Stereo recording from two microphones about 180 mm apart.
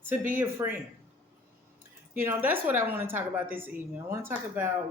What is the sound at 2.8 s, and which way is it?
Speech, 10° right (ahead or behind).